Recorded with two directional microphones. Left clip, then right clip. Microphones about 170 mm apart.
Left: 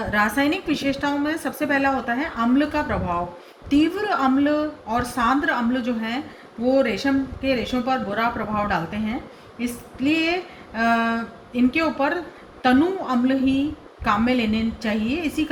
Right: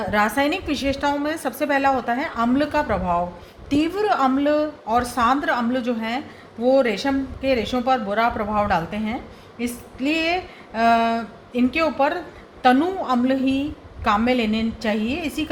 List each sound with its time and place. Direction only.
0.1 s a woman's voice: 50° right (ahead or behind)
9.6 s female singing: 50° right (ahead or behind)
10.8 s a woman's voice: 50° right (ahead or behind)